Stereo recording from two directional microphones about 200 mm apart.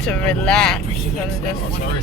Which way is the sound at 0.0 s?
5° left (ahead or behind).